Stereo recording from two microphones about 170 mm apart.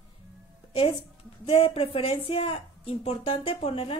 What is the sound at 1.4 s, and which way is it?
A woman's voice, 30° left (ahead or behind).